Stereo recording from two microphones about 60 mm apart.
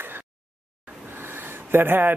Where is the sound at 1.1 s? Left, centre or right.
Right.